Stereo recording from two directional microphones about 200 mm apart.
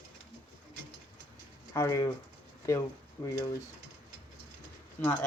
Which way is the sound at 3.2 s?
15° left (ahead or behind).